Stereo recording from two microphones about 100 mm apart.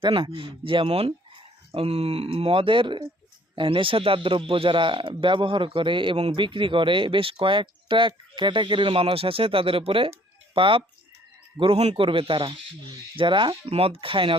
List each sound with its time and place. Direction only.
0.0 s speech: 60° right (ahead or behind)